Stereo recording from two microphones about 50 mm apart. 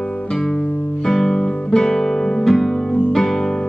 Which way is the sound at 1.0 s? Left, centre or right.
Centre.